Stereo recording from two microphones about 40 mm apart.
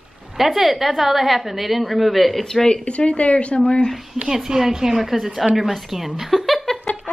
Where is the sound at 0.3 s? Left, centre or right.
Centre.